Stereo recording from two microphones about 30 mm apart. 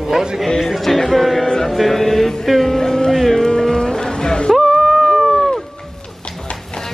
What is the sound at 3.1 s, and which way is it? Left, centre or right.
Music, centre.